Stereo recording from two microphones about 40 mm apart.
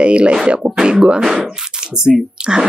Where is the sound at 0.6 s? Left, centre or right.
Centre.